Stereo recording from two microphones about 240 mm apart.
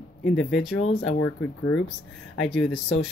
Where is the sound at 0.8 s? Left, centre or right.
Left.